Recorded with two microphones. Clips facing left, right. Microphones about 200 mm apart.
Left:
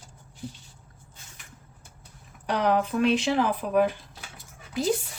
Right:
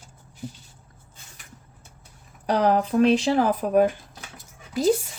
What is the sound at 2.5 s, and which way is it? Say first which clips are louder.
Speech: right 3 dB; 35° right (ahead or behind).